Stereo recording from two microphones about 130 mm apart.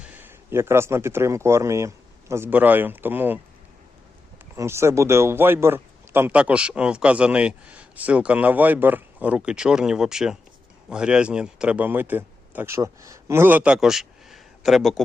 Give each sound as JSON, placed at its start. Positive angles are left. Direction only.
{"t": 0.0, "sound": "speech", "side_deg": -15}
{"t": 4.5, "sound": "a man's voice", "side_deg": -20}